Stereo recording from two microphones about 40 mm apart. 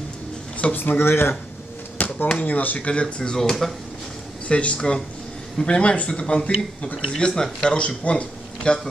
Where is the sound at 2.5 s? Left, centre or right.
Left.